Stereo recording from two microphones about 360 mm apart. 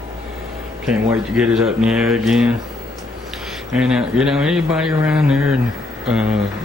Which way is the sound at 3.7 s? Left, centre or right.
Centre.